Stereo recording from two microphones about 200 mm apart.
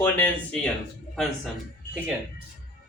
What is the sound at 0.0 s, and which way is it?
Speech, 10° left (ahead or behind).